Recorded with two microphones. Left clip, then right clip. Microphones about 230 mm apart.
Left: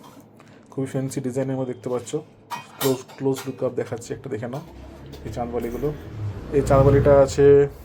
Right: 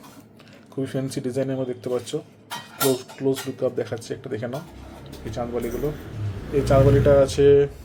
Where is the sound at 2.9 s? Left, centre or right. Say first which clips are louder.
Even; centre.